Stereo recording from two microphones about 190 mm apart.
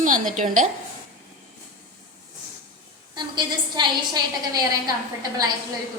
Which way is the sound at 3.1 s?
25° right (ahead or behind).